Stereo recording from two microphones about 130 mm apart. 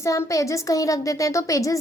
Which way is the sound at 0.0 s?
25° left (ahead or behind).